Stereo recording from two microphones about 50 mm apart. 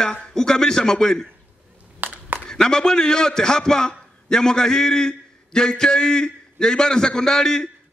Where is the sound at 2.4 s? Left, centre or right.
Centre.